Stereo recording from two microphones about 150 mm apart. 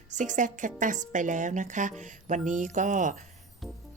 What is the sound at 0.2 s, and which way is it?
Speech, 55° right (ahead or behind).